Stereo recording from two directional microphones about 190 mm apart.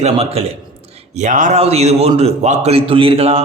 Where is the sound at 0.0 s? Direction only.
35° right (ahead or behind).